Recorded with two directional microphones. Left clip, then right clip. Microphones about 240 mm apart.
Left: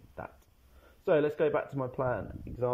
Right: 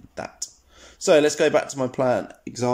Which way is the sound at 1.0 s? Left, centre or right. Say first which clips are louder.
Right 10 dB; centre.